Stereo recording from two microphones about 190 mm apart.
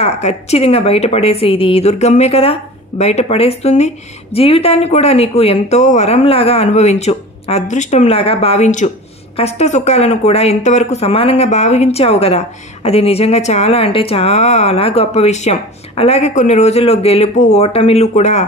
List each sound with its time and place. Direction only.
0.0 s speech: 35° left (ahead or behind)